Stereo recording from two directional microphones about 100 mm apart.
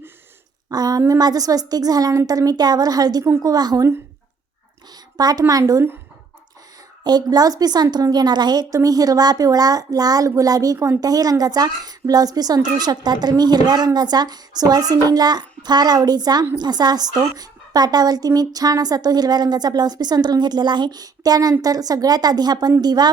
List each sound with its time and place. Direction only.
0.7 s a woman's voice: 40° right (ahead or behind)
5.1 s a woman's voice: 40° right (ahead or behind)
7.0 s a woman's voice: 45° right (ahead or behind)